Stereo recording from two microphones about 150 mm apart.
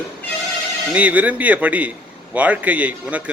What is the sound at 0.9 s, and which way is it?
Speech, 10° right (ahead or behind).